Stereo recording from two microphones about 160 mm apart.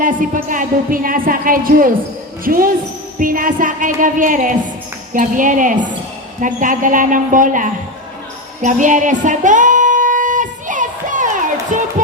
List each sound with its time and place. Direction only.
0.0 s speech: 55° right (ahead or behind)
8.6 s music: 50° right (ahead or behind)
11.7 s a sound: 55° right (ahead or behind)